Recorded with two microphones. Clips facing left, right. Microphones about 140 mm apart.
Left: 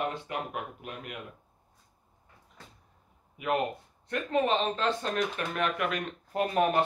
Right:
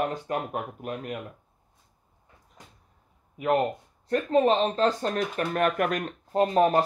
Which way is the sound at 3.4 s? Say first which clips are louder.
Right 5 dB; 35° right (ahead or behind).